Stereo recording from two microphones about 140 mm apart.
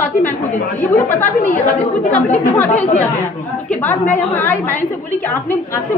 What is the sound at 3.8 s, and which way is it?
Speech, 15° left (ahead or behind).